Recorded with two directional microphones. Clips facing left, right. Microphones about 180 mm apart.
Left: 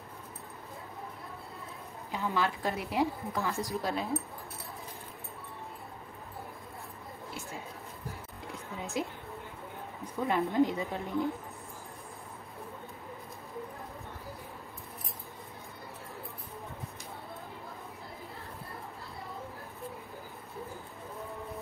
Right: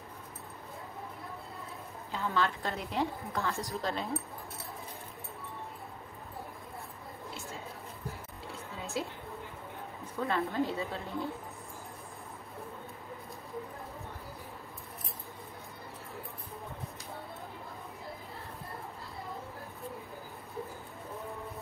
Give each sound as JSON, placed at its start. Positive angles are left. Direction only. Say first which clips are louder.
{"t": 2.1, "sound": "a woman's voice", "louder": "left 1 dB", "side_deg": 15}
{"t": 8.5, "sound": "music", "louder": "left 2 dB", "side_deg": 15}
{"t": 10.1, "sound": "a woman's voice", "louder": "left 4 dB", "side_deg": 15}